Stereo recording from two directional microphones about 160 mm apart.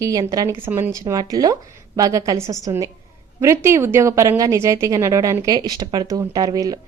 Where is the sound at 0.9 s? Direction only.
20° right (ahead or behind).